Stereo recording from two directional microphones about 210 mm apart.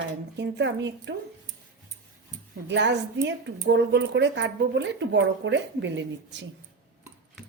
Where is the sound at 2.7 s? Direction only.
55° right (ahead or behind).